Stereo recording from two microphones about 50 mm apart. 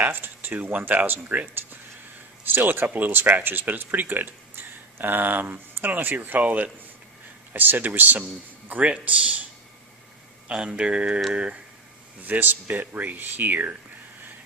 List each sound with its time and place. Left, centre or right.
0.0 s speech: right
2.4 s speech: right
10.8 s speech: centre
12.2 s speech: right